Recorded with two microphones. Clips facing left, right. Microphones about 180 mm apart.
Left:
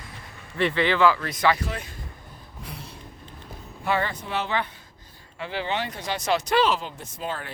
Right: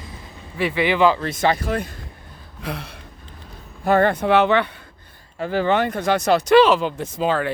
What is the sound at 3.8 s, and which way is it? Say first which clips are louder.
Speech: right 10 dB; 55° right (ahead or behind).